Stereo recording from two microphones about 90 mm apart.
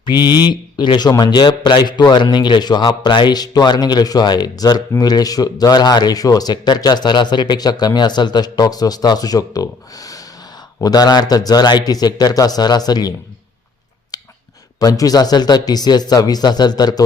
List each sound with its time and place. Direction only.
0.0 s speech: 55° left (ahead or behind)
14.1 s a sound: 45° left (ahead or behind)
14.8 s speech: 45° left (ahead or behind)